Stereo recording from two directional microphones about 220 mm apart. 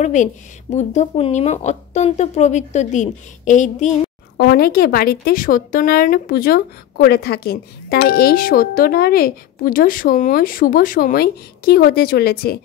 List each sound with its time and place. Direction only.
0.0 s a woman's voice: 35° left (ahead or behind)
4.4 s a woman's voice: 45° left (ahead or behind)